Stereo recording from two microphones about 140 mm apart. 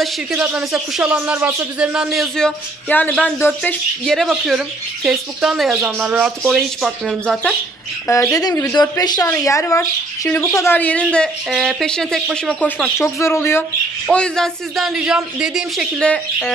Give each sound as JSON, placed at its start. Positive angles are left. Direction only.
{"t": 0.0, "sound": "speech", "side_deg": -5}
{"t": 4.0, "sound": "speech", "side_deg": 0}
{"t": 8.1, "sound": "speech", "side_deg": 20}
{"t": 12.6, "sound": "speech", "side_deg": 15}
{"t": 14.0, "sound": "speech", "side_deg": 5}
{"t": 16.0, "sound": "speech", "side_deg": 5}